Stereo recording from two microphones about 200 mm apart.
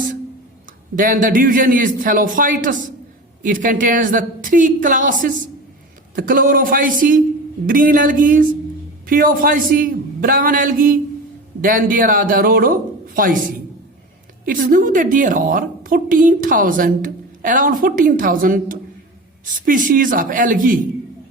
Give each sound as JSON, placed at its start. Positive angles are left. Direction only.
{"t": 0.9, "sound": "a woman's voice", "side_deg": -40}